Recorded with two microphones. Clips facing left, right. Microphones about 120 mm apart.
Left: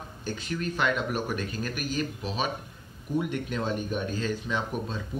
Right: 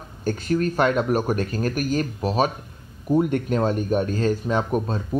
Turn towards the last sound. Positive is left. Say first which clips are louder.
# right 8 dB
turn(degrees=-45)  # may be behind; listen again after turning